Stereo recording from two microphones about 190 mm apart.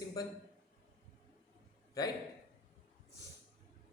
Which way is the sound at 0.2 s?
20° left (ahead or behind).